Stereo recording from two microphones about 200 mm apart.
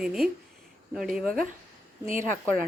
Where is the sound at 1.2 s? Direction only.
45° right (ahead or behind).